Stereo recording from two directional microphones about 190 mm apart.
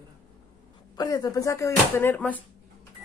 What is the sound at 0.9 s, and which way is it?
Speech, 20° left (ahead or behind).